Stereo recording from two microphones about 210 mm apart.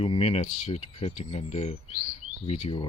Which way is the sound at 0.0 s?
30° left (ahead or behind).